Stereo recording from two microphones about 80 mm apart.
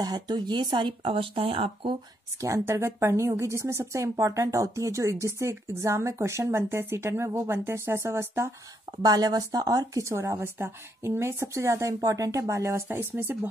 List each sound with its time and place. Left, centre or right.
0.0 s speech: right
2.4 s a woman's voice: right
9.0 s a woman's voice: right
12.8 s speech: right